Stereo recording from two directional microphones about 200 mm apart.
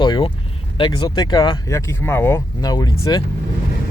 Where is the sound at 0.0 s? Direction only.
25° left (ahead or behind).